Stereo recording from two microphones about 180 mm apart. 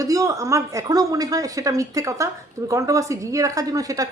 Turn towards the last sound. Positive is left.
turn(degrees=-20)  # may be behind; listen again after turning